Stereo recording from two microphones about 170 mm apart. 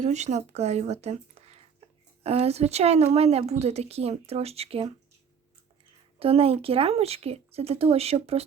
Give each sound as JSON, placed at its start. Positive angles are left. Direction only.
{"t": 0.0, "sound": "speech", "side_deg": -40}
{"t": 6.1, "sound": "speech", "side_deg": -35}